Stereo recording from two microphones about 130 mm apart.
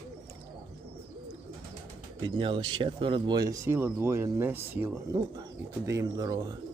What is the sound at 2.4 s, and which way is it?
Speech, 45° right (ahead or behind).